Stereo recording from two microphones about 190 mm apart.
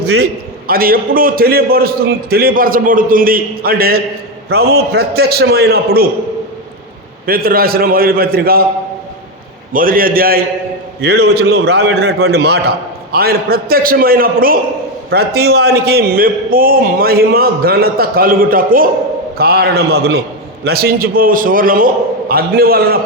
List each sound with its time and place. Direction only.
0.0 s a man's voice: 60° right (ahead or behind)
7.3 s a man's voice: 50° right (ahead or behind)
9.7 s a man's voice: 50° right (ahead or behind)